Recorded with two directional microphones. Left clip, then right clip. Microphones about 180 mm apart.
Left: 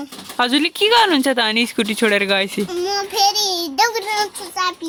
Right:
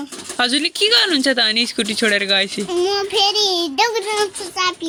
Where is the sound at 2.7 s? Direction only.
10° left (ahead or behind).